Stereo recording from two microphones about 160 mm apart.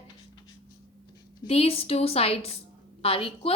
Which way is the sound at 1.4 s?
40° left (ahead or behind).